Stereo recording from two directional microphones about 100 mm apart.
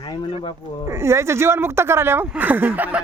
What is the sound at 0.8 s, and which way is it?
Speech, 25° right (ahead or behind).